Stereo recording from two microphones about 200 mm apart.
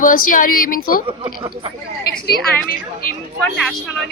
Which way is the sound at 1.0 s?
25° right (ahead or behind).